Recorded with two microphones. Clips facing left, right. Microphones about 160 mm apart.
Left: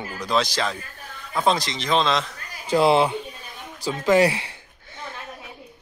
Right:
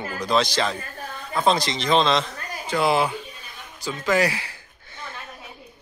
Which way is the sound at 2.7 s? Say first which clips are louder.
Left 4 dB; 30° left (ahead or behind).